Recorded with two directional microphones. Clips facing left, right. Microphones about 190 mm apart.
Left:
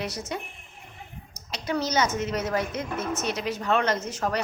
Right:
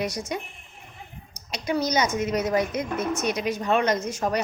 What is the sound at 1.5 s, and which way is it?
A woman's voice, 15° right (ahead or behind).